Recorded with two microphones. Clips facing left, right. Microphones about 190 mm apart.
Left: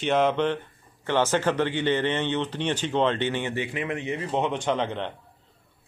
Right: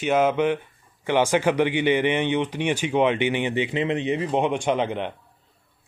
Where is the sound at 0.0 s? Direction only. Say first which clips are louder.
Right 2 dB; 5° right (ahead or behind).